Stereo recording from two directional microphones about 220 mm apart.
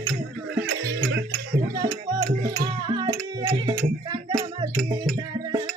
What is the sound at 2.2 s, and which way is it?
Music, 15° right (ahead or behind).